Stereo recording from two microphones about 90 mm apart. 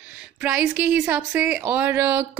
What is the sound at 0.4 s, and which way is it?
A woman's voice, 15° right (ahead or behind).